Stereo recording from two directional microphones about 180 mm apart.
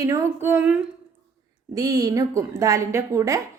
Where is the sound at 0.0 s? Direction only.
15° right (ahead or behind).